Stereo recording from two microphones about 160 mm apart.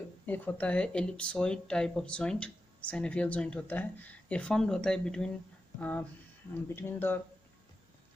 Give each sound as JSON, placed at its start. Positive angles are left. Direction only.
{"t": 0.3, "sound": "speech", "side_deg": 10}